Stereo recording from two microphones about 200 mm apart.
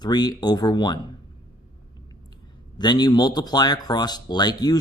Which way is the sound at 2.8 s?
20° left (ahead or behind).